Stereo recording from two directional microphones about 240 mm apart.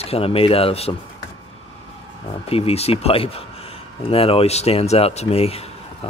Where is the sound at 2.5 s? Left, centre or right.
Left.